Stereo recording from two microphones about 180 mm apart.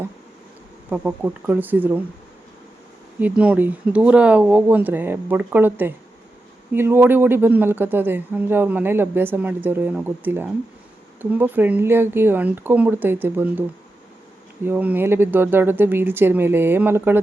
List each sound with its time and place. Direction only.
0.9 s speech: 10° right (ahead or behind)
3.2 s speech: 10° right (ahead or behind)